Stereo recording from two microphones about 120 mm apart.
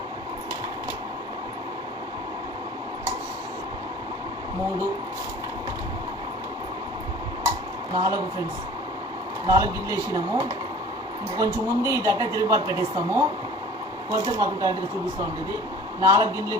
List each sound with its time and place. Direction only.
7.9 s a woman's voice: 30° right (ahead or behind)
9.5 s a woman's voice: 30° right (ahead or behind)